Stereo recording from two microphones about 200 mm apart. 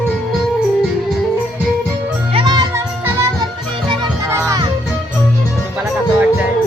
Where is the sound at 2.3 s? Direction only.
25° right (ahead or behind).